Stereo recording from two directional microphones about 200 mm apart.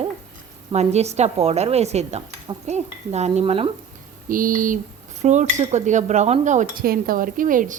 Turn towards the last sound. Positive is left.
turn(degrees=-40)  # may be behind; listen again after turning